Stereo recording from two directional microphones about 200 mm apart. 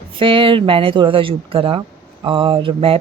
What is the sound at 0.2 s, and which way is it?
Speech, 25° right (ahead or behind).